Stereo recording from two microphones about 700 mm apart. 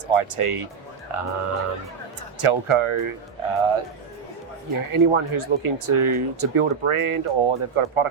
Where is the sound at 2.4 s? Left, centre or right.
Right.